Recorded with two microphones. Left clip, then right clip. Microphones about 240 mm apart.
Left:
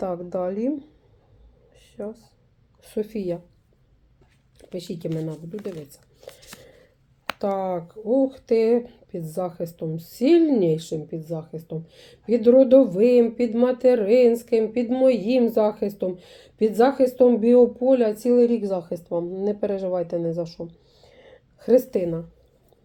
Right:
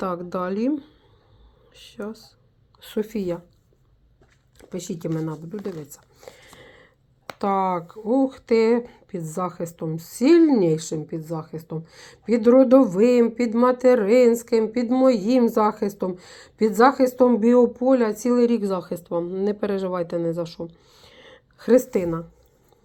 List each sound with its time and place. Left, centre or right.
0.0 s speech: right
4.7 s speech: right
7.3 s speech: right
20.7 s a sound: right